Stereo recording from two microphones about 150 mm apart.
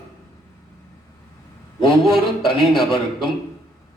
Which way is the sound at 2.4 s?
35° left (ahead or behind).